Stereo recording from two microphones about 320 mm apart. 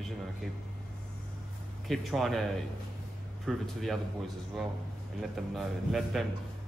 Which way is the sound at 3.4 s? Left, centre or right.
Centre.